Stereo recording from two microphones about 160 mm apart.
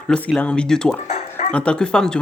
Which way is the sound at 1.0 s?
40° left (ahead or behind).